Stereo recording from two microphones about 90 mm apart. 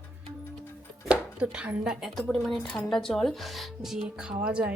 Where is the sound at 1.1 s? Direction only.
15° right (ahead or behind).